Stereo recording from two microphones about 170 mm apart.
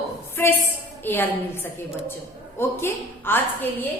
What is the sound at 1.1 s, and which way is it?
Speech, 15° left (ahead or behind).